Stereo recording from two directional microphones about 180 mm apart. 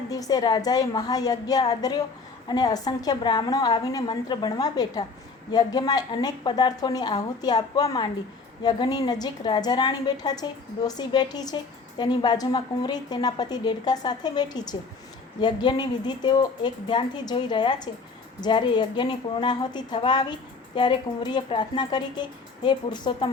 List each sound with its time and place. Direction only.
0.1 s a woman's voice: 20° left (ahead or behind)